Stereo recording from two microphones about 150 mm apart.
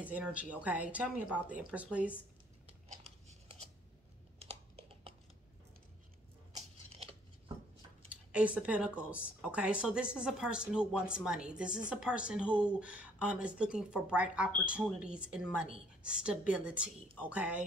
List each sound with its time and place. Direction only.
0.0 s speech: 10° right (ahead or behind)
4.4 s computer keyboard: 40° right (ahead or behind)
6.9 s a sound: 40° right (ahead or behind)
8.1 s speech: 10° right (ahead or behind)